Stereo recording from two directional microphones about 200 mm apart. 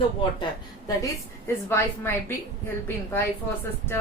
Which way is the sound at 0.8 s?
15° left (ahead or behind).